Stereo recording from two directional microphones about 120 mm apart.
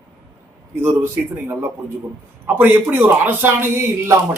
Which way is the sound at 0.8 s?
20° right (ahead or behind).